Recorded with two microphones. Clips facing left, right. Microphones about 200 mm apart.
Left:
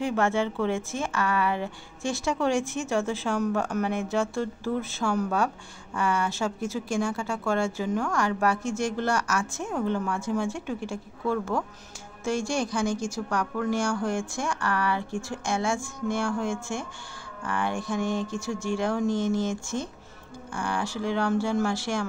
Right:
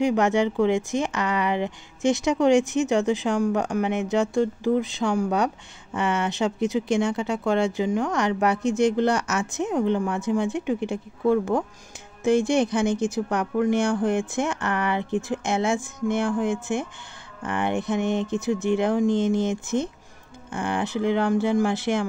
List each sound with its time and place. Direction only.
0.0 s a woman's voice: 15° right (ahead or behind)